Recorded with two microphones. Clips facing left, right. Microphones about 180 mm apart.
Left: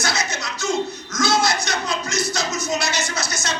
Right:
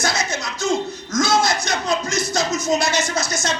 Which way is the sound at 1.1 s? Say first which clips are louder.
Right 2 dB; 50° right (ahead or behind).